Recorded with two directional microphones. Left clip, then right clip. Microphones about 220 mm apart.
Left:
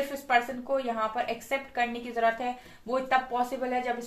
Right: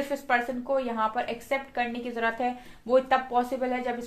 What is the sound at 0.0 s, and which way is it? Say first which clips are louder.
A woman's voice: even; 40° right (ahead or behind).